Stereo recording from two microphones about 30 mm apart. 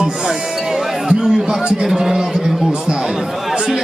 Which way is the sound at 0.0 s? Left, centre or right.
Right.